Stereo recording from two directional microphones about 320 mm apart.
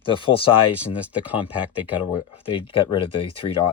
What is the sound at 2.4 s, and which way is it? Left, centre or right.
Speech, centre.